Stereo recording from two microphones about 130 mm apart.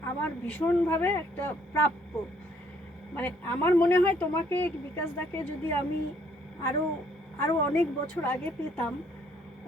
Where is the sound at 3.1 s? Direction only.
15° left (ahead or behind).